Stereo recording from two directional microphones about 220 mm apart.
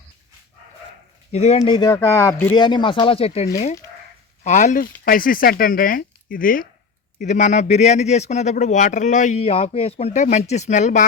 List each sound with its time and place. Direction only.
1.3 s a man's voice: 30° left (ahead or behind)